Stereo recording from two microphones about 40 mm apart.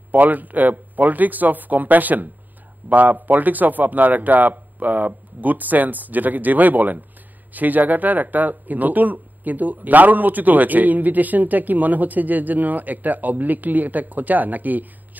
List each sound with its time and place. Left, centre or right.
0.1 s speech: right